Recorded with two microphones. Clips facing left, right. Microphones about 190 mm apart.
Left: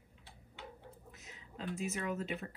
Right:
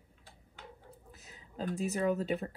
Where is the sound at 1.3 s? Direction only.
40° right (ahead or behind).